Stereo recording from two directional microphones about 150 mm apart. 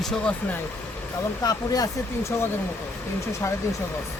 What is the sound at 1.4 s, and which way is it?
Speech, 25° left (ahead or behind).